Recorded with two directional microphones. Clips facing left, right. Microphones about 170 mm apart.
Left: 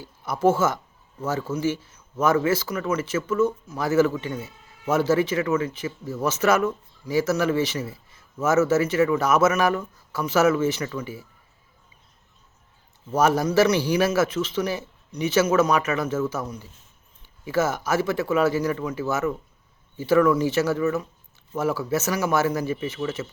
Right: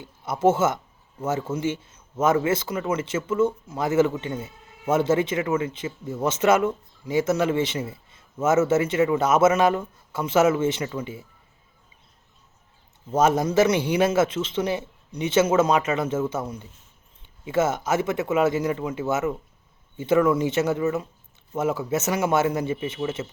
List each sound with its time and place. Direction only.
0.0 s speech: 20° right (ahead or behind)
13.1 s speech: 20° right (ahead or behind)